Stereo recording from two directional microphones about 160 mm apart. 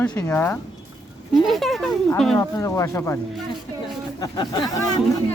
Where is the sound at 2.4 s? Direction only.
20° left (ahead or behind).